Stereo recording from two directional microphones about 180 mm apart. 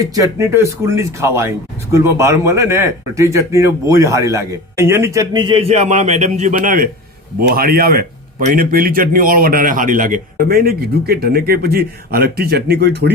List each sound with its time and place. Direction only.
0.0 s speech: 20° right (ahead or behind); by 13.1 s 65° right (ahead or behind)